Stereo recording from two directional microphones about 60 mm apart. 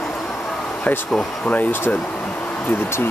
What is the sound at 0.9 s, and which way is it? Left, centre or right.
Speech, left.